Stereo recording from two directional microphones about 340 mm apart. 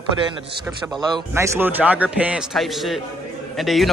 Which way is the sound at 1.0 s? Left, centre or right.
Centre.